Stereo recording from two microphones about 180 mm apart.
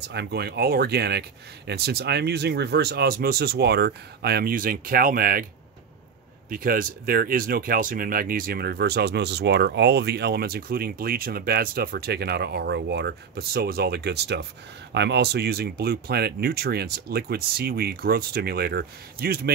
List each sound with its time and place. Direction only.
0.0 s speech: 70° right (ahead or behind); by 5.5 s 50° right (ahead or behind)
6.5 s speech: 50° right (ahead or behind)